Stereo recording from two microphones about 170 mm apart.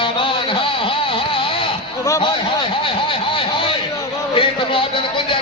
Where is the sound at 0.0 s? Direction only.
30° left (ahead or behind).